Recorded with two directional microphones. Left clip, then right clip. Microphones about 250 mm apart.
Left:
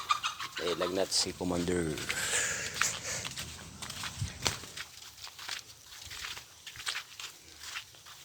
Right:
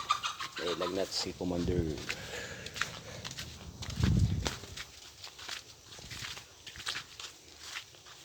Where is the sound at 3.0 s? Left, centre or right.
Centre.